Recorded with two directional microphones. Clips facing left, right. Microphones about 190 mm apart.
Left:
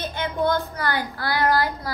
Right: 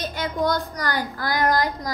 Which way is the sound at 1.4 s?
15° right (ahead or behind).